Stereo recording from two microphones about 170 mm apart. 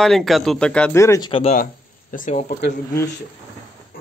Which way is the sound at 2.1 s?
45° left (ahead or behind).